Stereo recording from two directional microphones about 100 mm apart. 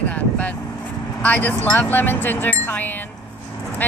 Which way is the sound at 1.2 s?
15° left (ahead or behind).